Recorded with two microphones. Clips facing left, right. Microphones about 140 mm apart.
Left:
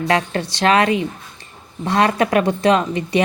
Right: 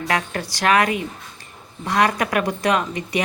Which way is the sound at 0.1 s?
25° left (ahead or behind).